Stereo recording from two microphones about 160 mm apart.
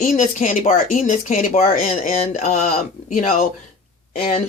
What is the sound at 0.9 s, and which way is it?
Speech, 55° left (ahead or behind).